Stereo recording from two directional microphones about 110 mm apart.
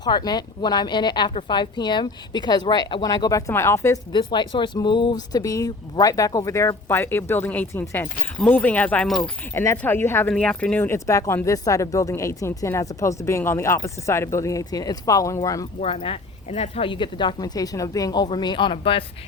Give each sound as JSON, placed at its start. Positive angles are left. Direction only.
{"t": 0.0, "sound": "speech", "side_deg": 40}
{"t": 4.1, "sound": "speech", "side_deg": 45}
{"t": 9.0, "sound": "speech", "side_deg": 0}
{"t": 9.6, "sound": "a woman's voice", "side_deg": 20}
{"t": 10.3, "sound": "a woman's voice", "side_deg": 10}
{"t": 15.8, "sound": "speech", "side_deg": 55}
{"t": 16.5, "sound": "speech", "side_deg": 65}
{"t": 16.9, "sound": "speech", "side_deg": 45}